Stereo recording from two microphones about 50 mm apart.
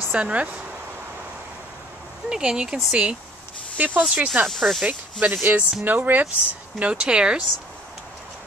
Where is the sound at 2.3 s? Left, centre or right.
Centre.